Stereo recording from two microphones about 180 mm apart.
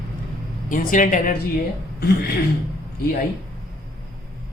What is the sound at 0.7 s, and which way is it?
Speech, 45° left (ahead or behind).